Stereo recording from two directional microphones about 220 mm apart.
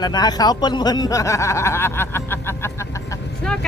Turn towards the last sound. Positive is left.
turn(degrees=5)  # may be behind; listen again after turning